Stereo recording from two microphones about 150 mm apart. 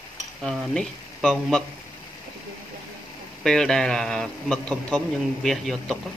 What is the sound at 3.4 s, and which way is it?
A man's voice, 5° left (ahead or behind).